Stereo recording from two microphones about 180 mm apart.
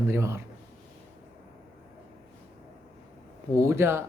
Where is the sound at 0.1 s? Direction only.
15° right (ahead or behind).